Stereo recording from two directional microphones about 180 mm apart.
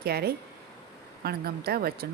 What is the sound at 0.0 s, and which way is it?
Speech, 60° right (ahead or behind).